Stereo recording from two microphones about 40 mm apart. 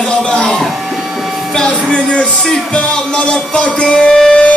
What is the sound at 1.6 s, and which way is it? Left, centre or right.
Music, left.